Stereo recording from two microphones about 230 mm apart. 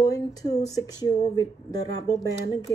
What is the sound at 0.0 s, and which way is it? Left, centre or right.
Speech, centre.